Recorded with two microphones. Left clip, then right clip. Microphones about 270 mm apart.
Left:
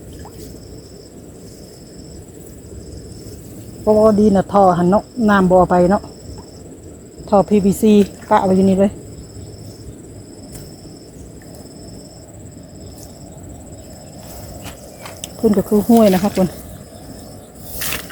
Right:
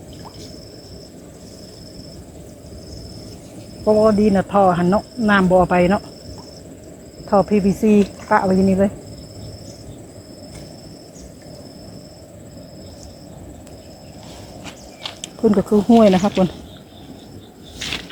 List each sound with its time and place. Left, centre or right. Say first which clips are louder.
3.8 s speech: left 2 dB; centre
7.3 s a woman's voice: left 2 dB; centre
14.6 s snake: right 1 dB; centre
17.7 s a sound: left 1 dB; left